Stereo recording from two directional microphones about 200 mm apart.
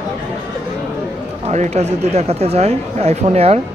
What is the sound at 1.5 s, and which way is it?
Speech, 35° right (ahead or behind).